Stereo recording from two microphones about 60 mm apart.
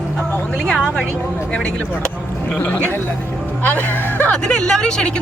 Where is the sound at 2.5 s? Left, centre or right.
Left.